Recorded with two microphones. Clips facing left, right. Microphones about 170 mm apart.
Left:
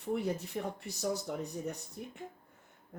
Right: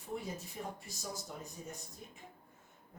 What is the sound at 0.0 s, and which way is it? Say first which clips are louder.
Speech: left 8 dB; 65° left (ahead or behind).